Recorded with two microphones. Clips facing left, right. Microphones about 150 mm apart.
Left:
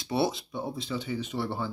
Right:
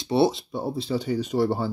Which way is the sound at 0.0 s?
25° right (ahead or behind).